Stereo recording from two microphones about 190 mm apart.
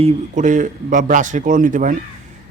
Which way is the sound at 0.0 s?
40° right (ahead or behind).